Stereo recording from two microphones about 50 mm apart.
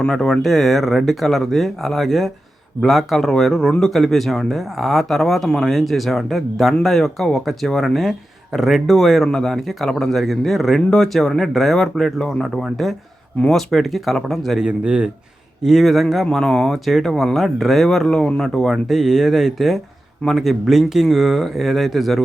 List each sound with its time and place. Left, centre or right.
0.0 s speech: centre
12.7 s speech: centre
14.6 s a man's voice: centre
15.6 s speech: centre
16.3 s speech: centre